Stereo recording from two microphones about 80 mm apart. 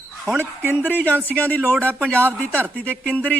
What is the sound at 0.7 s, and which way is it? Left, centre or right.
Speech, left.